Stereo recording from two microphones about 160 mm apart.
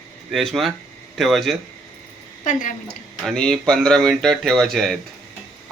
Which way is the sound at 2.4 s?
55° left (ahead or behind).